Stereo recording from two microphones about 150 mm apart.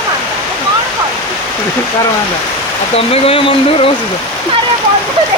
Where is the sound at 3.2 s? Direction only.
35° left (ahead or behind).